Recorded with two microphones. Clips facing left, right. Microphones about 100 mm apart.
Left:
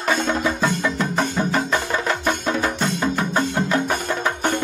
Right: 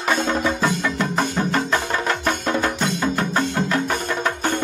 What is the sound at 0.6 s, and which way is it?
Music, centre (ahead or behind).